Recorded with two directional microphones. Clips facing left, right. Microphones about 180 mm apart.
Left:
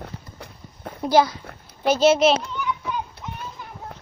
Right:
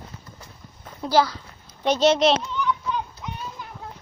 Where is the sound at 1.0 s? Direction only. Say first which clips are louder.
Left 2 dB; 15° left (ahead or behind).